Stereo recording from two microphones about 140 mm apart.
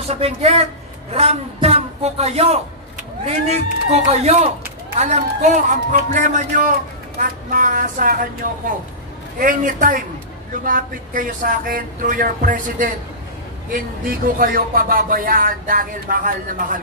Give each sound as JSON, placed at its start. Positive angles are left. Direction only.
{"t": 0.1, "sound": "a man's voice", "side_deg": -50}
{"t": 10.6, "sound": "speech", "side_deg": -85}
{"t": 13.7, "sound": "speech", "side_deg": -85}